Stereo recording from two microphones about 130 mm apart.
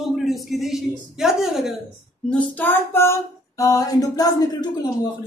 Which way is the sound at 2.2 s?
10° left (ahead or behind).